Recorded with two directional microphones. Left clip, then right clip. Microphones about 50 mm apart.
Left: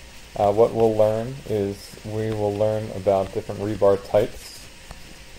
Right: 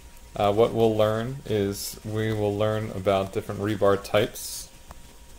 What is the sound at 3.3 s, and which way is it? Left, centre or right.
Speech, right.